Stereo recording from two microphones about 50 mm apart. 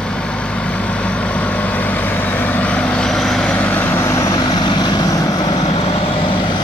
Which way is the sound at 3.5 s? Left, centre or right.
Left.